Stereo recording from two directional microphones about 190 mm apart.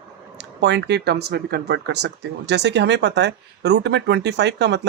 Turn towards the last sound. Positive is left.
turn(degrees=-65)  # may be behind; listen again after turning